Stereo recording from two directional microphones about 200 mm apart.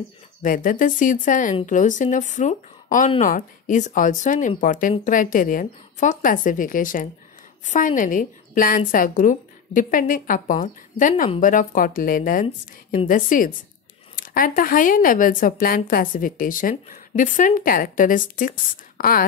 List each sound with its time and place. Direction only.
0.4 s a woman's voice: 40° left (ahead or behind)